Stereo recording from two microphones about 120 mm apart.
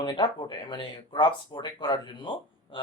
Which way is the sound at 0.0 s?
40° left (ahead or behind).